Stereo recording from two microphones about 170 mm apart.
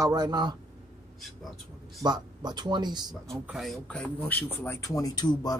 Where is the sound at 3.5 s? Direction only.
Centre (ahead or behind).